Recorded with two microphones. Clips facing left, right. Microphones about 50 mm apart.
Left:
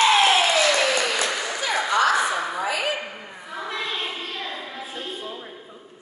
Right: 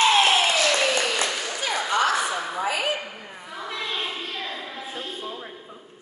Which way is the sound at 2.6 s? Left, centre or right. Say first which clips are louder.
Right 3 dB; centre.